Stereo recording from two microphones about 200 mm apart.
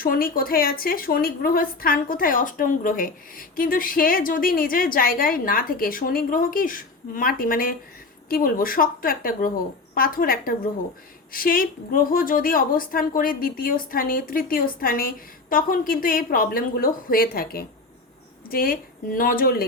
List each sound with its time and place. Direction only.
0.0 s a woman's voice: 45° left (ahead or behind)